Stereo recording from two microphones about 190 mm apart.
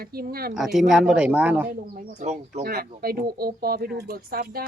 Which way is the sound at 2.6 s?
55° right (ahead or behind).